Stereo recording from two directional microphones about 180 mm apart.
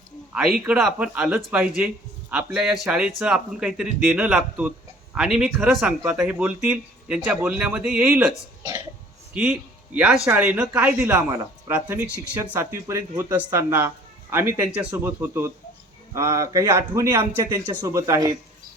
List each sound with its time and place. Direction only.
0.6 s speech: 5° right (ahead or behind)
9.3 s speech: 5° right (ahead or behind)